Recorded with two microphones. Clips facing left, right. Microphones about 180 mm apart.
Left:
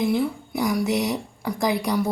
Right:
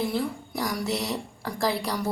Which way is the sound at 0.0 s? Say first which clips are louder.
Left 5 dB; 10° left (ahead or behind).